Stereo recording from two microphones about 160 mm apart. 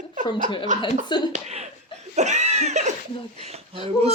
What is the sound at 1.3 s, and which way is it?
Speech, 45° right (ahead or behind).